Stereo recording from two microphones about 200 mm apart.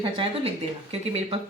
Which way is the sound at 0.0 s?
25° right (ahead or behind).